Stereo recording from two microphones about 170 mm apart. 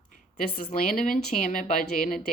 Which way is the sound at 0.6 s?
50° left (ahead or behind).